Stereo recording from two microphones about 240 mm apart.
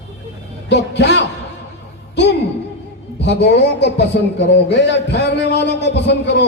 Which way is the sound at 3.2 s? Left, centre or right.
Left.